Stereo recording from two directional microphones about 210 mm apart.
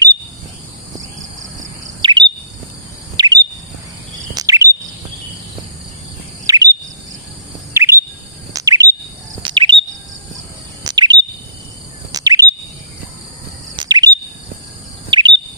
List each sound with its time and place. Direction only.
2.0 s bird vocalization: 20° right (ahead or behind)
6.4 s bird vocalization: 15° right (ahead or behind)
7.7 s bird vocalization: 10° right (ahead or behind)
8.5 s chirp: 15° right (ahead or behind)
10.8 s bird vocalization: 20° right (ahead or behind)
13.7 s bird vocalization: 20° right (ahead or behind)